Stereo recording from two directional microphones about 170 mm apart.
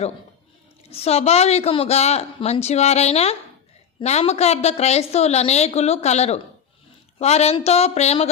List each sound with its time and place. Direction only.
0.9 s a woman's voice: 35° left (ahead or behind)